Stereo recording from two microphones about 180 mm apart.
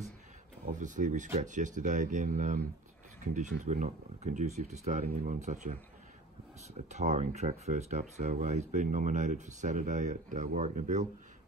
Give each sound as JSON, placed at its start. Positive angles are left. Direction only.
{"t": 0.7, "sound": "speech", "side_deg": -45}
{"t": 6.9, "sound": "speech", "side_deg": -40}